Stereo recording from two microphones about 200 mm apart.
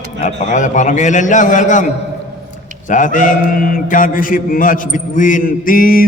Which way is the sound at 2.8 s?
40° left (ahead or behind).